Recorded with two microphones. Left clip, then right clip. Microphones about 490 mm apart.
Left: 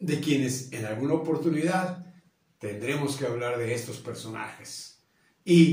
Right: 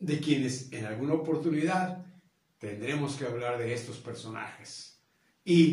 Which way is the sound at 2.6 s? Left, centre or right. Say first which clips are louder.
Left 4 dB; right.